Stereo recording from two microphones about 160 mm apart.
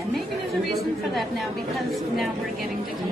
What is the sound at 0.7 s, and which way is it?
A woman's voice, centre (ahead or behind).